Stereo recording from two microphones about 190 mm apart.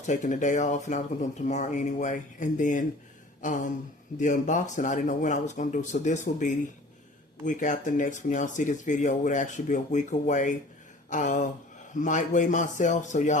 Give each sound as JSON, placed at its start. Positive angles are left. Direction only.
{"t": 0.0, "sound": "speech", "side_deg": 40}
{"t": 3.4, "sound": "a sound", "side_deg": 40}
{"t": 4.2, "sound": "speech", "side_deg": 40}